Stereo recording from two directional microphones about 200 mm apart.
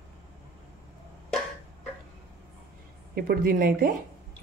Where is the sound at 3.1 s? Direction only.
50° right (ahead or behind).